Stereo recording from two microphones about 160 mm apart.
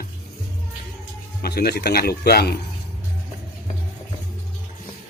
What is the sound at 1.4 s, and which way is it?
Speech, 80° left.